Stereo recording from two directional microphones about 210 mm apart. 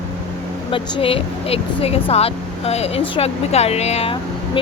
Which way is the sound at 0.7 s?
25° left (ahead or behind).